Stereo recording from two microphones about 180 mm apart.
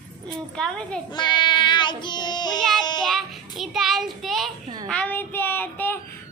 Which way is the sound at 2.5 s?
5° left (ahead or behind).